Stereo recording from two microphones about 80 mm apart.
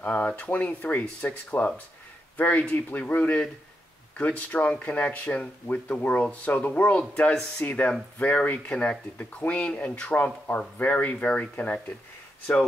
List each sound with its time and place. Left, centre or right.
0.0 s speech: centre